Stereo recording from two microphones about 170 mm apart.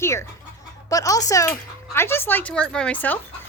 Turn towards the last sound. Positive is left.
turn(degrees=10)  # may be behind; listen again after turning